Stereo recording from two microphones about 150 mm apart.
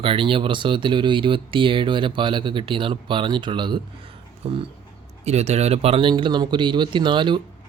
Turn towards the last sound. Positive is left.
turn(degrees=-30)  # may be behind; listen again after turning